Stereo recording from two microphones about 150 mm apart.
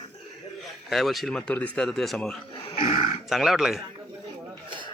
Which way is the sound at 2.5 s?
40° left (ahead or behind).